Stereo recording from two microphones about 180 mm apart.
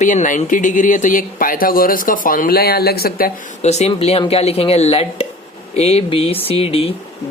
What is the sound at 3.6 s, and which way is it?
Speech, 40° left (ahead or behind).